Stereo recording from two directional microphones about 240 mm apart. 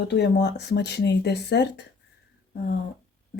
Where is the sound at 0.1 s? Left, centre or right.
Left.